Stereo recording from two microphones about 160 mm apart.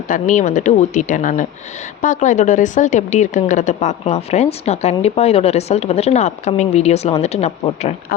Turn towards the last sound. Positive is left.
turn(degrees=40)  # may be behind; listen again after turning